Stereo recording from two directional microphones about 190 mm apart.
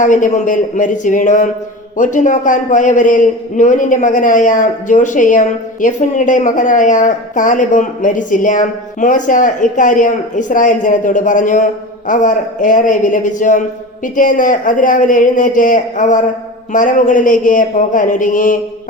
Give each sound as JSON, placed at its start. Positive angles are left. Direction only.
{"t": 0.0, "sound": "a man's voice", "side_deg": 40}